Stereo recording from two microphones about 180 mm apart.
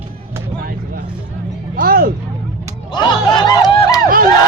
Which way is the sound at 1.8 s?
55° right (ahead or behind).